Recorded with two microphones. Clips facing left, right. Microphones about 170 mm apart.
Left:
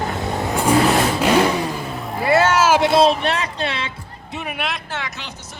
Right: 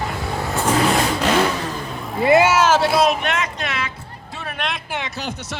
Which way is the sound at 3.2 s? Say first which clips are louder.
Left 2 dB; 35° left (ahead or behind).